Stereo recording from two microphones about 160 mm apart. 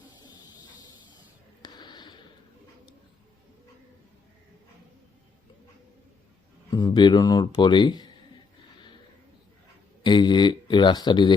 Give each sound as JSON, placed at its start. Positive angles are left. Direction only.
{"t": 0.2, "sound": "a sound", "side_deg": 25}
{"t": 6.7, "sound": "speech", "side_deg": 25}
{"t": 10.0, "sound": "speech", "side_deg": 30}